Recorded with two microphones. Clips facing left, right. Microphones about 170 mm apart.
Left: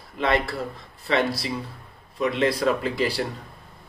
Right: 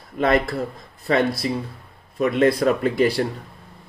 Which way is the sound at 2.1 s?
50° right (ahead or behind).